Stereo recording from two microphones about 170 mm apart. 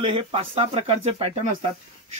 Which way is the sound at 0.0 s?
30° right (ahead or behind).